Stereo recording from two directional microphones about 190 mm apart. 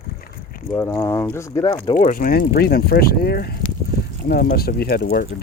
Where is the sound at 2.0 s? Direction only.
45° left (ahead or behind).